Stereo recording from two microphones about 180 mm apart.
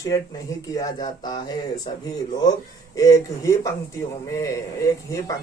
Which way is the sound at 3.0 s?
20° left (ahead or behind).